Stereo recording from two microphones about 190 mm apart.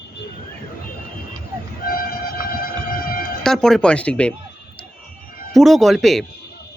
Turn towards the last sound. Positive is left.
turn(degrees=0)  # may be behind; listen again after turning